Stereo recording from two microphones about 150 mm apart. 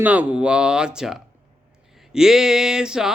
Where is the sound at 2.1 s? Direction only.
5° right (ahead or behind).